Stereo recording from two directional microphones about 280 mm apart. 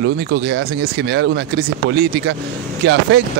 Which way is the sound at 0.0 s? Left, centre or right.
Right.